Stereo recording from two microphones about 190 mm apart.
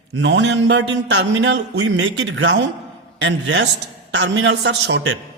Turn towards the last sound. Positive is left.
turn(degrees=-65)  # may be behind; listen again after turning